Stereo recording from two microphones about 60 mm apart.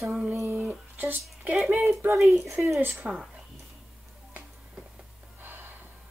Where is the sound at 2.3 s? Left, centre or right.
Right.